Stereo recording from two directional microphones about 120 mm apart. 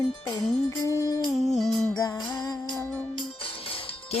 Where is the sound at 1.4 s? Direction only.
Centre (ahead or behind).